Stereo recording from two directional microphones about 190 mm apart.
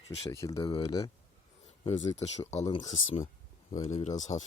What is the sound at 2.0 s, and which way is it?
Speech, 35° left (ahead or behind).